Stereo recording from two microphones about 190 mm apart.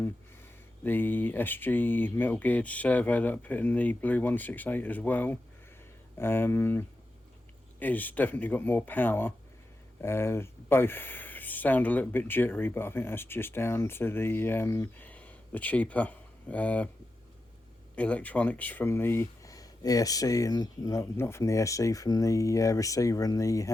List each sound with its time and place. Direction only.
0.9 s speech: 10° left (ahead or behind)
17.9 s speech: 5° left (ahead or behind)